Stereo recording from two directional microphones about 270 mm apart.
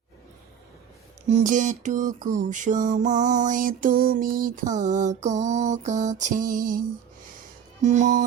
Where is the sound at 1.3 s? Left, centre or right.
Right.